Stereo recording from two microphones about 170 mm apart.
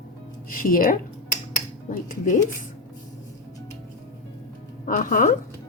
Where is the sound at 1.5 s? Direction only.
50° left (ahead or behind).